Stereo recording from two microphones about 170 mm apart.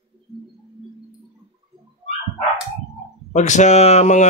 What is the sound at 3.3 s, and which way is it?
Speech, 45° left (ahead or behind).